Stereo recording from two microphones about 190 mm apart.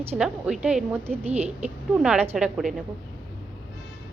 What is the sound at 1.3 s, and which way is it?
Speech, 35° right (ahead or behind).